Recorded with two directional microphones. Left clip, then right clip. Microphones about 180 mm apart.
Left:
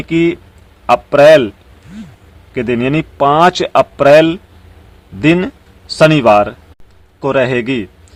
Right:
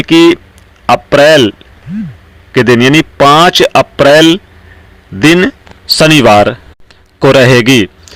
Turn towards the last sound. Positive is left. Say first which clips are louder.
# right 9 dB
turn(degrees=-35)  # may be behind; listen again after turning